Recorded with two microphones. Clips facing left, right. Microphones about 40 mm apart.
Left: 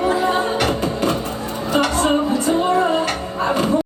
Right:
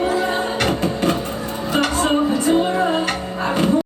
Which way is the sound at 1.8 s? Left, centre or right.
Right.